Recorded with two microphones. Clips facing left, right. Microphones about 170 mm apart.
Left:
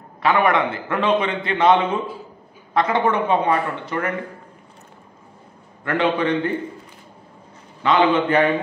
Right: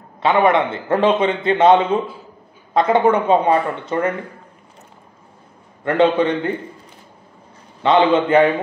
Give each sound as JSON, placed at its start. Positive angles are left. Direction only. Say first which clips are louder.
{"t": 0.2, "sound": "speech", "louder": "right 3 dB", "side_deg": -25}
{"t": 5.9, "sound": "speech", "louder": "right 5 dB", "side_deg": -25}
{"t": 7.8, "sound": "speech", "louder": "right 3 dB", "side_deg": -25}